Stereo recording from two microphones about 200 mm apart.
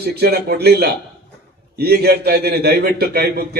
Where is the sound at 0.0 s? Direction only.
55° right (ahead or behind).